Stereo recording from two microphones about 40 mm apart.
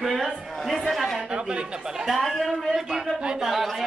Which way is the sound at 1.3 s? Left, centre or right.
Right.